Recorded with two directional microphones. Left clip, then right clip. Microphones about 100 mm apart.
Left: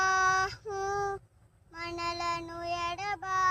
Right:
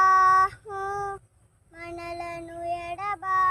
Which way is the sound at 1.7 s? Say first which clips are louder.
Left 1 dB; 25° right (ahead or behind).